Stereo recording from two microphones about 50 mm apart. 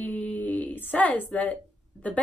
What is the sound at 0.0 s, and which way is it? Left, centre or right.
Speech, left.